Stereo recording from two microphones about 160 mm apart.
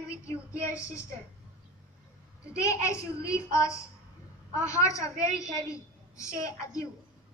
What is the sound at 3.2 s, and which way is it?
A woman's voice, 20° left (ahead or behind).